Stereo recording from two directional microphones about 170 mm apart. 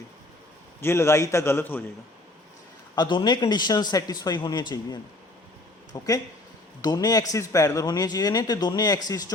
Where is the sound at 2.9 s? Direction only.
25° left (ahead or behind).